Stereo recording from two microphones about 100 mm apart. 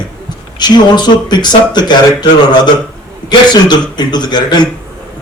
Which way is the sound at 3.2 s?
45° left (ahead or behind).